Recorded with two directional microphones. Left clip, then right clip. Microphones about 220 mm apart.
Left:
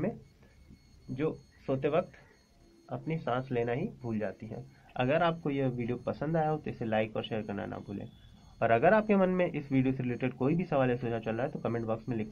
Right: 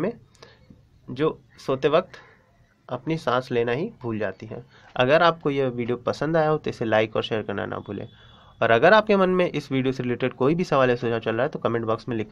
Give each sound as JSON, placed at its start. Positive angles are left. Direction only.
{"t": 1.1, "sound": "speech", "side_deg": -40}